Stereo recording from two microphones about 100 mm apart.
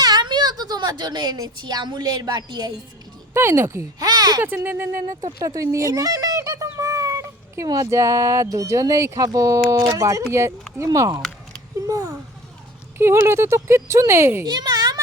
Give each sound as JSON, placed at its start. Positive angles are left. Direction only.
{"t": 0.0, "sound": "a child's voice", "side_deg": -45}
{"t": 3.3, "sound": "speech", "side_deg": -25}
{"t": 4.0, "sound": "speech", "side_deg": -40}
{"t": 4.4, "sound": "speech", "side_deg": -20}
{"t": 5.4, "sound": "a child's voice", "side_deg": -35}
{"t": 11.9, "sound": "a sound", "side_deg": -35}
{"t": 13.0, "sound": "speech", "side_deg": -25}
{"t": 14.4, "sound": "a sound", "side_deg": -45}